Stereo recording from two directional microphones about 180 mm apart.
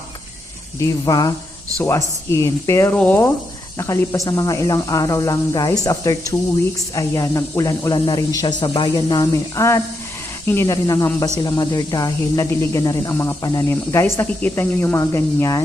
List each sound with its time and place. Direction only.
0.8 s speech: 20° left (ahead or behind)
2.3 s speech: 15° left (ahead or behind)